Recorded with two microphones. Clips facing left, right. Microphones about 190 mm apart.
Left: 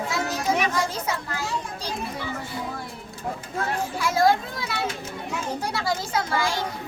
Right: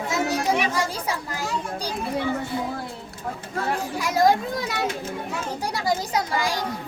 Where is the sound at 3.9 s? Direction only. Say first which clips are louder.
Right 1 dB; 15° right (ahead or behind).